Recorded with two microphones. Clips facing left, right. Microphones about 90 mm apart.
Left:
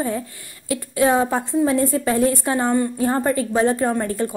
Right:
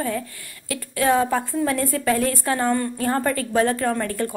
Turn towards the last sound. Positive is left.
turn(degrees=20)  # may be behind; listen again after turning